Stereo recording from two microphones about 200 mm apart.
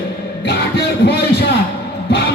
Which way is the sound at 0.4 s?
55° left (ahead or behind).